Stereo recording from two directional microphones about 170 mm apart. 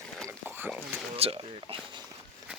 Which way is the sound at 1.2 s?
30° right (ahead or behind).